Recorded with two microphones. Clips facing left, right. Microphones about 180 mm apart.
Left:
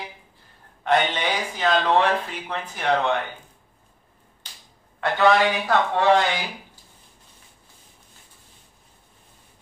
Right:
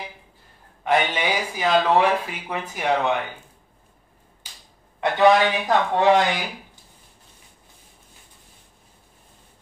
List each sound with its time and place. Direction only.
0.8 s speech: 10° right (ahead or behind)
5.0 s speech: 15° right (ahead or behind)